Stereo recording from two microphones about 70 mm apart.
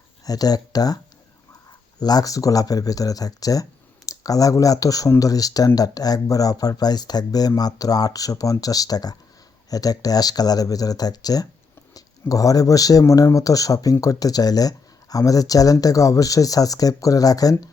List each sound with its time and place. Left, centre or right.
0.3 s speech: left
2.0 s speech: left
12.3 s speech: left